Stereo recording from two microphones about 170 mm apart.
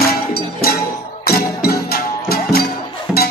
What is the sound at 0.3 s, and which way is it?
Music, 65° left (ahead or behind).